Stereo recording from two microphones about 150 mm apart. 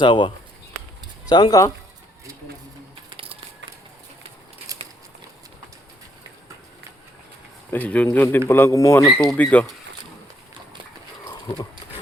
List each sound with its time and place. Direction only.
0.0 s speech: 30° left (ahead or behind)
1.3 s speech: 25° left (ahead or behind)
7.7 s a man's voice: 10° left (ahead or behind)
9.1 s a man's voice: 10° left (ahead or behind)
11.3 s horse: 35° left (ahead or behind)